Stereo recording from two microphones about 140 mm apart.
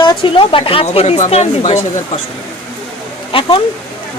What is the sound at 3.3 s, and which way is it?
Speech, 40° left (ahead or behind).